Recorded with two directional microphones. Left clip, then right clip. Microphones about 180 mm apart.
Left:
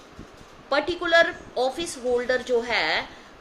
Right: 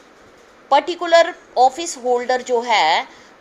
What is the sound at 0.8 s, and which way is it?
A woman's voice, 20° right (ahead or behind).